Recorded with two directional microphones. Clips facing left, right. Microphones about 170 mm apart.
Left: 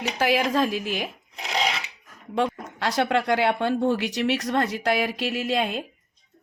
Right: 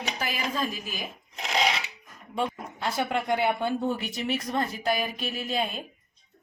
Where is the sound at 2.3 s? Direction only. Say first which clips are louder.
Left 5 dB; 85° left.